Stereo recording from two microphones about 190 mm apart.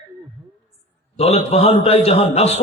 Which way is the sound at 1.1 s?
30° left (ahead or behind).